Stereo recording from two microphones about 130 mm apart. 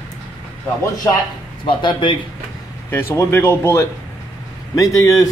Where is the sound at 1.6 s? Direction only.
40° left (ahead or behind).